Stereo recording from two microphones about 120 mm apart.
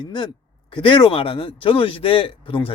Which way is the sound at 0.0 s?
40° left (ahead or behind).